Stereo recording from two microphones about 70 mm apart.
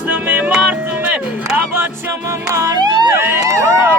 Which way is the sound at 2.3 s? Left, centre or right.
Right.